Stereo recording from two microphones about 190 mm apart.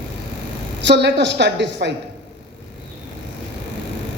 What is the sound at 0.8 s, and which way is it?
A man's voice, 65° right (ahead or behind).